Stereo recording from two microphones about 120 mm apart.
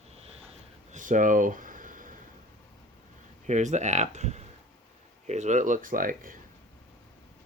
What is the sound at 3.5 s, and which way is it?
Speech, 80° right.